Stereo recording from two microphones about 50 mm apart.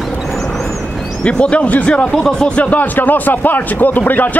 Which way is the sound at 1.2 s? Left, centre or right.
Left.